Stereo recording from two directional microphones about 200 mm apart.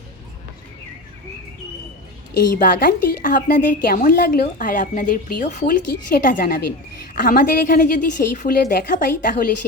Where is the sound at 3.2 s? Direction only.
40° left (ahead or behind).